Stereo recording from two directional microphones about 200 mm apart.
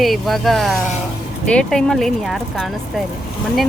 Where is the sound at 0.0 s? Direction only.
Centre (ahead or behind).